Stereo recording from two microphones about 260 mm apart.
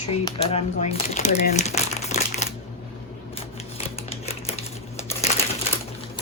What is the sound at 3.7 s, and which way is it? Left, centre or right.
Crumpling, left.